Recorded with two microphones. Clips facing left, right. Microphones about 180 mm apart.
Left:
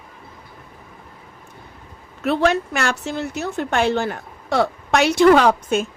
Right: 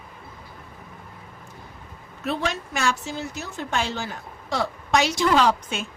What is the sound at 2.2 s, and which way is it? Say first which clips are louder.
Speech: left 9 dB; 65° left (ahead or behind).